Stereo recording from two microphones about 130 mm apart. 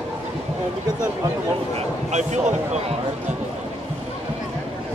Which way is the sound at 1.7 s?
60° right (ahead or behind).